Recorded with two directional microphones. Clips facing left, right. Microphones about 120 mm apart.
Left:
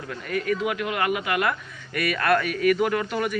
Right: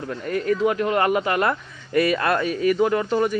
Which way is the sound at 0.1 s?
30° right (ahead or behind).